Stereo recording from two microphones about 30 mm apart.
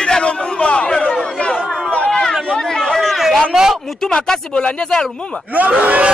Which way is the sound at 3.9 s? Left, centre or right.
Centre.